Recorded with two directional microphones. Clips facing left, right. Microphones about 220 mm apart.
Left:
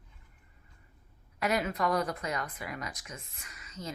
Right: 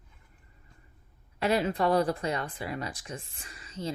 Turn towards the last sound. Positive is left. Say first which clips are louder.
# right 6 dB
turn(degrees=-30)  # may be behind; listen again after turning